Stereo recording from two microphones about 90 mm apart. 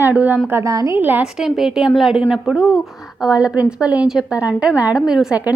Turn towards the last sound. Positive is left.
turn(degrees=-5)  # may be behind; listen again after turning